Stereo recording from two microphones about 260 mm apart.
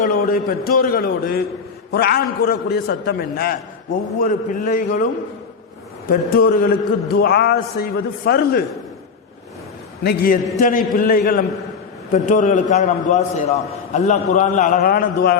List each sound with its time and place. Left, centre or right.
0.0 s a man's voice: left
6.1 s a man's voice: left
10.0 s a man's voice: left